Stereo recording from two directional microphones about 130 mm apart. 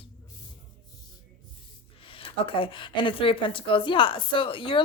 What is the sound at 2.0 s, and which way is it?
Speech, 45° left (ahead or behind).